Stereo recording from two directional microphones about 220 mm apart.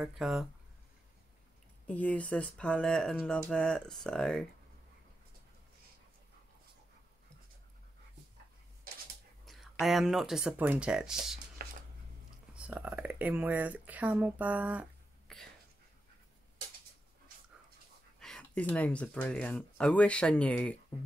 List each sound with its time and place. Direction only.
0.0 s speech: centre (ahead or behind)
1.9 s speech: 5° left (ahead or behind)
9.5 s speech: centre (ahead or behind)
11.6 s a sound: 40° right (ahead or behind)
12.5 s speech: 5° right (ahead or behind)
18.2 s speech: 5° left (ahead or behind)